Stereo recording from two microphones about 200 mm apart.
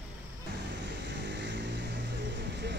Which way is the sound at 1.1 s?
60° right (ahead or behind).